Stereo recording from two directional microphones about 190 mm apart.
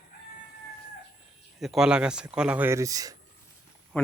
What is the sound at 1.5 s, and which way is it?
Speech, centre (ahead or behind).